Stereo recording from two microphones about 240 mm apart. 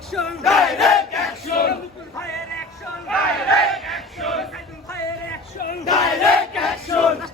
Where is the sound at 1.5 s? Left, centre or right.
Left.